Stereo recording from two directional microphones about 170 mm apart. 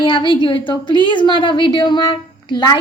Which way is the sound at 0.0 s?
30° left (ahead or behind).